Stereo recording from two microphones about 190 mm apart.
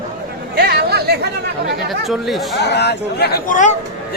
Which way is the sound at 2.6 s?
65° left (ahead or behind).